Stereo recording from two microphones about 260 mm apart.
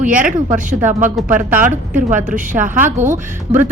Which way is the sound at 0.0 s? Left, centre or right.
Centre.